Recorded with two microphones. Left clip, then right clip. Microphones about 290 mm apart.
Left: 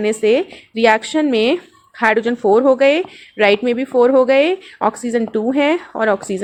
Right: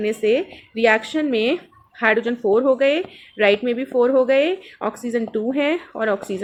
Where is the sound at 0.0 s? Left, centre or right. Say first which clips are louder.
Left 4 dB; left.